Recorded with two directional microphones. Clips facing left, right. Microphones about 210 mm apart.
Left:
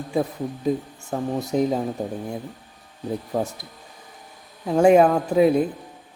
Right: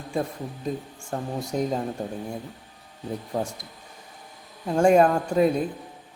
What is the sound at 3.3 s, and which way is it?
Speech, 5° left (ahead or behind).